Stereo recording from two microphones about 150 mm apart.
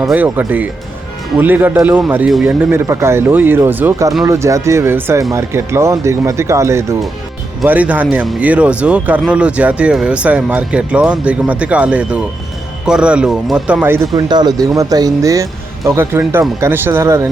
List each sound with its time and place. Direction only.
0.0 s speech: 5° right (ahead or behind)
13.8 s speech: 15° right (ahead or behind)
14.1 s speech: 30° right (ahead or behind)